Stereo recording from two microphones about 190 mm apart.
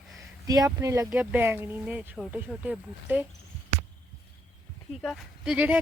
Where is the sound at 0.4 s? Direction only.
20° right (ahead or behind).